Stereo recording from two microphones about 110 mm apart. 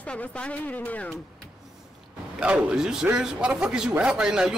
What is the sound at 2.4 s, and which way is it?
A man's voice, 5° right (ahead or behind).